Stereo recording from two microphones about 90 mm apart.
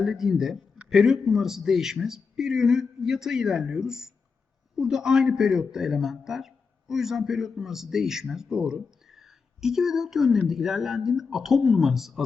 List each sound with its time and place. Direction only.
0.0 s a man's voice: 5° right (ahead or behind)